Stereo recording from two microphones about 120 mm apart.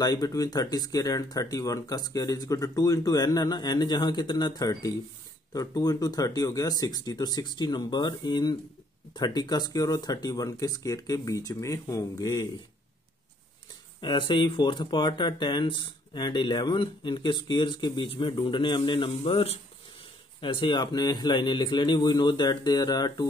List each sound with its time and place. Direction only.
0.0 s speech: 35° left (ahead or behind)
14.0 s speech: 45° left (ahead or behind)